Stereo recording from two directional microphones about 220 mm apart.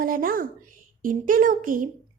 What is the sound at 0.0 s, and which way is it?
A child's voice, 40° right (ahead or behind).